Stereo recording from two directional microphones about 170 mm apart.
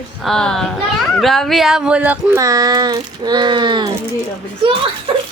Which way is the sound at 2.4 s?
20° right (ahead or behind).